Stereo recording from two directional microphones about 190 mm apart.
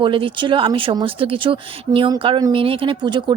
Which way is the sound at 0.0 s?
25° right (ahead or behind).